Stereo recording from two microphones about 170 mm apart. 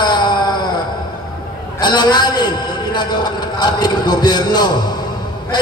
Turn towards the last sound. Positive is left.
turn(degrees=25)  # may be behind; listen again after turning